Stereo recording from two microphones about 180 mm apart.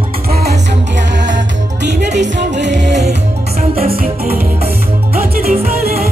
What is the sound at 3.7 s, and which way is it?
Music, 55° right (ahead or behind).